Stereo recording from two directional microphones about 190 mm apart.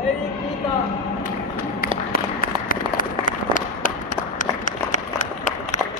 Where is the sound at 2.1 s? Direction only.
50° left (ahead or behind).